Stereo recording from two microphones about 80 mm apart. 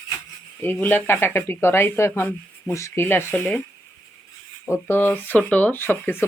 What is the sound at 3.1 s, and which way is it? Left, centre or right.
Speech, left.